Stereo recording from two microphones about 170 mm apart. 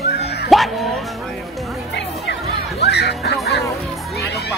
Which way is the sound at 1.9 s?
80° left.